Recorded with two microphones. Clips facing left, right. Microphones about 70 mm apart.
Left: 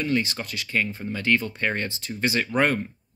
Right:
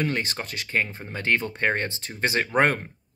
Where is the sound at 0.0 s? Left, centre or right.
Right.